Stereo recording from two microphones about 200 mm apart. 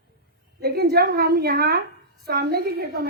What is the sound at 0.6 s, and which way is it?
A woman's voice, 50° right (ahead or behind).